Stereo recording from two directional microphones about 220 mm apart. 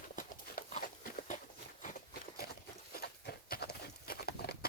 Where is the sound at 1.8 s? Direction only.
40° left (ahead or behind).